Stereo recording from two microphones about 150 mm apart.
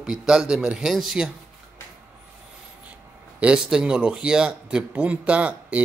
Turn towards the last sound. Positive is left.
turn(degrees=-10)  # may be behind; listen again after turning